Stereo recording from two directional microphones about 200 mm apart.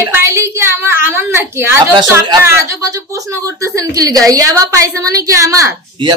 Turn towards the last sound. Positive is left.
turn(degrees=-20)  # may be behind; listen again after turning